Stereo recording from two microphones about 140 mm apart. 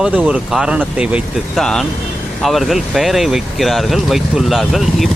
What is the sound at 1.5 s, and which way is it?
Speech, centre (ahead or behind).